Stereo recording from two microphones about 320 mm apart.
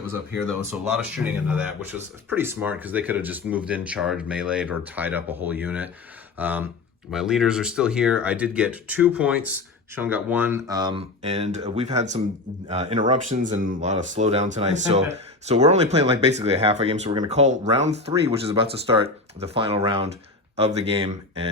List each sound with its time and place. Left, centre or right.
0.1 s speech: centre